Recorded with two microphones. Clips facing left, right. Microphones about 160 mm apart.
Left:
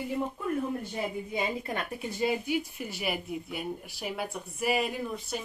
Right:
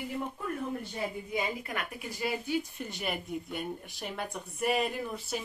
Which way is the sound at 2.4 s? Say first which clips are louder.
Left 1 dB; 10° left (ahead or behind).